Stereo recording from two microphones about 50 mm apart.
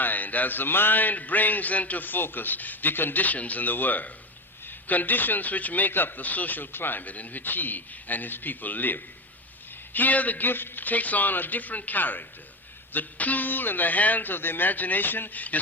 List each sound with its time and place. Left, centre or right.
0.0 s speech: left